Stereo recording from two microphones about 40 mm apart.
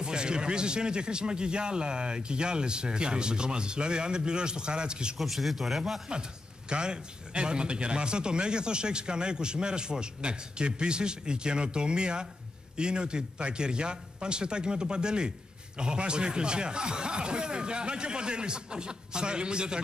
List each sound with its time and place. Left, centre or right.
0.0 s a man's voice: right
5.1 s a man's voice: centre
6.7 s a man's voice: right